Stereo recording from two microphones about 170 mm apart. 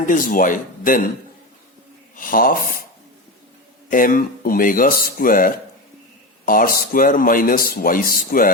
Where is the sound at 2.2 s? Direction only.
55° left (ahead or behind).